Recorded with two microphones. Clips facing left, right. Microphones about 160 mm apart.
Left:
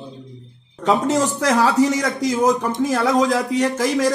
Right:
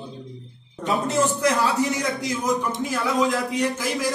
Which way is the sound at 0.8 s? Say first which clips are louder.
Left 4 dB; 90° left.